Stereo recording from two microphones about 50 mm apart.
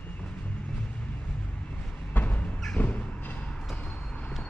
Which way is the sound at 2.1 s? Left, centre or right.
Left.